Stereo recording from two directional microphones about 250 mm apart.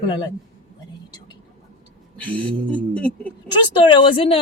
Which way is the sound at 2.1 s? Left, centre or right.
Centre.